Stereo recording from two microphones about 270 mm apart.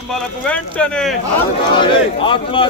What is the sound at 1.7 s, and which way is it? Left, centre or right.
Speech, centre.